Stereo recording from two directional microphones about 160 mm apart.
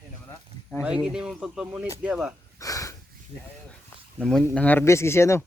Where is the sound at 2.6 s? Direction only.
20° left (ahead or behind).